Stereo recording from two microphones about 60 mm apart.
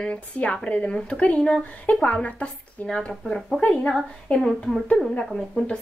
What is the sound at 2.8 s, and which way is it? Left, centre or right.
Speech, centre.